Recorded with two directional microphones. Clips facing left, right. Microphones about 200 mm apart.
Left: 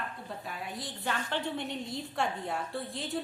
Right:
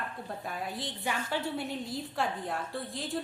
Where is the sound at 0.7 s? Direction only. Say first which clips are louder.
Right 2 dB; 25° right (ahead or behind).